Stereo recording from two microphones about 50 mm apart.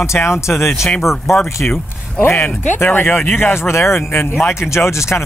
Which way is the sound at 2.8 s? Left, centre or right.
Left.